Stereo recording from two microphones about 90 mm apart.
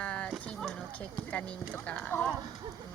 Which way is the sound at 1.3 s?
15° left (ahead or behind).